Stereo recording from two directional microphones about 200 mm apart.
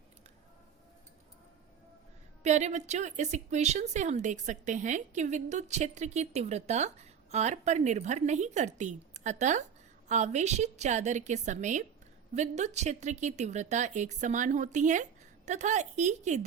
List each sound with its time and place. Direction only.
2.4 s speech: 35° right (ahead or behind)